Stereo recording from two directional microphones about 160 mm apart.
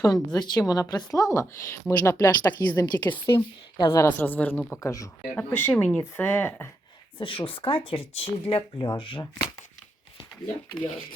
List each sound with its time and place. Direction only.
0.0 s a woman's voice: 25° left (ahead or behind)
7.2 s speech: 35° left (ahead or behind)